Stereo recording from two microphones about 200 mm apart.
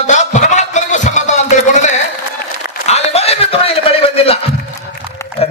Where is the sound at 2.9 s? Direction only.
30° left (ahead or behind).